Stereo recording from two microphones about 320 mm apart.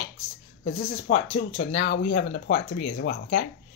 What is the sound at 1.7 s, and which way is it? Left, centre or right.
Speech, left.